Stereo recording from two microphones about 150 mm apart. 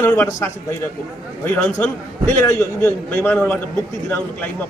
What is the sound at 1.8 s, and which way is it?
A man's voice, 15° left (ahead or behind).